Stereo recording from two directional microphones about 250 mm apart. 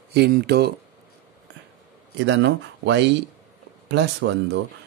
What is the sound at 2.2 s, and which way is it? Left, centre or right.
Speech, right.